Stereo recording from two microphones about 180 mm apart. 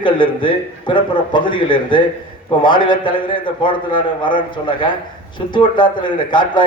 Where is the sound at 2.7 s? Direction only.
50° left (ahead or behind).